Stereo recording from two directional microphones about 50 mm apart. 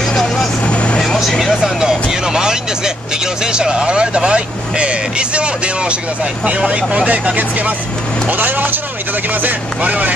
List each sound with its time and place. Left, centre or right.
1.5 s vehicle: centre
1.9 s vehicle: centre
3.5 s speech: centre